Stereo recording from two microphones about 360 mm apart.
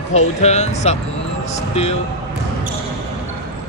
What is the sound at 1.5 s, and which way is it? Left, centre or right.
Music, centre.